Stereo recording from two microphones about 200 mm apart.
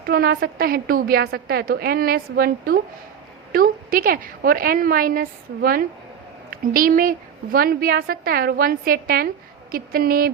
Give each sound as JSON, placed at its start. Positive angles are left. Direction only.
{"t": 0.1, "sound": "a woman's voice", "side_deg": -50}